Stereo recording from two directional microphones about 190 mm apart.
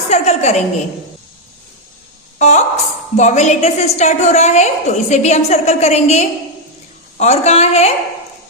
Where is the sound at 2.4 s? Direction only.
35° left (ahead or behind).